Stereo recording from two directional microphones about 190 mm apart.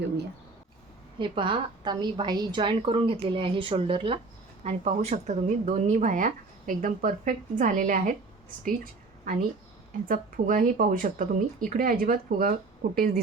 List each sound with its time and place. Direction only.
1.2 s a woman's voice: 25° right (ahead or behind); by 13.1 s 50° right (ahead or behind)